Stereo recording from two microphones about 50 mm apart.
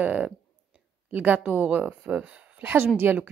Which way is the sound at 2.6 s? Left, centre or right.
Right.